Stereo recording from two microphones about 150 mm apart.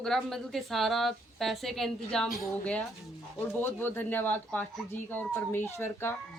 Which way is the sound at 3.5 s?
15° left (ahead or behind).